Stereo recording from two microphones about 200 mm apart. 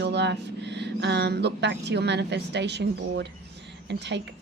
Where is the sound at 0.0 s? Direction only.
60° right (ahead or behind).